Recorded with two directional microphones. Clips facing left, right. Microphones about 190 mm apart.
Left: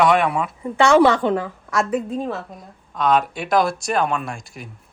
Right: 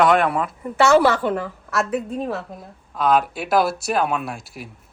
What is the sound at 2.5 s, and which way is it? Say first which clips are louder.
Speech: right 1 dB; 5° right (ahead or behind).